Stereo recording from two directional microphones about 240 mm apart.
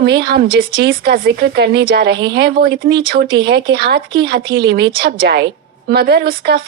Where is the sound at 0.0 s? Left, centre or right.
Right.